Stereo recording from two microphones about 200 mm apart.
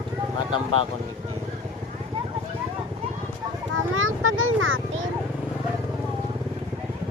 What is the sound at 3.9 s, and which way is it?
Speech, 85° right.